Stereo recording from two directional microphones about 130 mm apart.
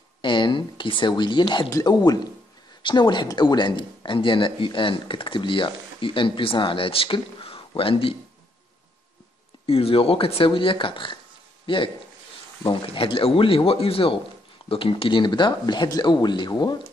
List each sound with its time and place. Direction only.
0.2 s speech: 40° left (ahead or behind)
9.7 s a man's voice: 45° left (ahead or behind)